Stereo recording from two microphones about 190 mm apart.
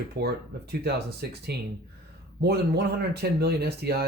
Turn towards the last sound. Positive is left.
turn(degrees=-55)  # may be behind; listen again after turning